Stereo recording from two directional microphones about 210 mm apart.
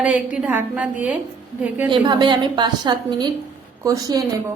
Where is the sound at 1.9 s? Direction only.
20° right (ahead or behind).